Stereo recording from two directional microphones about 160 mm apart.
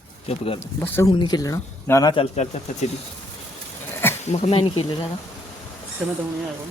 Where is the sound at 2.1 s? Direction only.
40° left (ahead or behind).